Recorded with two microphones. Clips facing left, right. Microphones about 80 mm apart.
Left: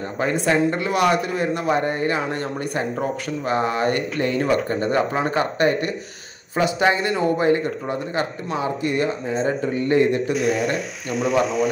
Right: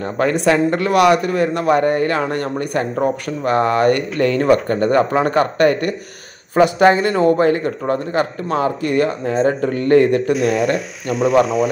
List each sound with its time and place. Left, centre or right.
0.0 s a man's voice: right
10.3 s speech: centre